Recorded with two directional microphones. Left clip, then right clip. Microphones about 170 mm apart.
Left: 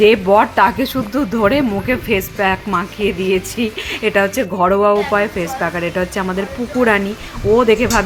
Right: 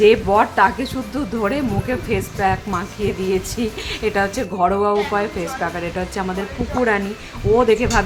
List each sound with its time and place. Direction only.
0.0 s speech: 20° left (ahead or behind)
7.5 s speech: 15° left (ahead or behind)